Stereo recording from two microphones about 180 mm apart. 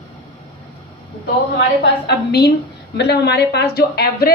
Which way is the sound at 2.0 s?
65° left (ahead or behind).